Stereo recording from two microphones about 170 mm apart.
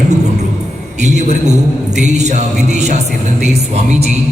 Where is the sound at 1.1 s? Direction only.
45° right (ahead or behind).